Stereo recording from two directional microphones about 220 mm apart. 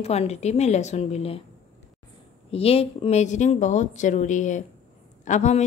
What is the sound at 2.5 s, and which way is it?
A woman's voice, 25° left (ahead or behind).